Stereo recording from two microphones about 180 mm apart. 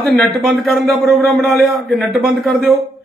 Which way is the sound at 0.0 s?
Centre (ahead or behind).